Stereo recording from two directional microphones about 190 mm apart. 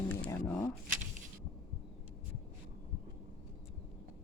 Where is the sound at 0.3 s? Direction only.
15° left (ahead or behind).